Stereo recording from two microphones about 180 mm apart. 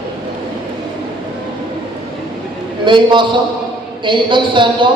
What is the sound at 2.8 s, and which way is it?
A man's voice, 25° right (ahead or behind).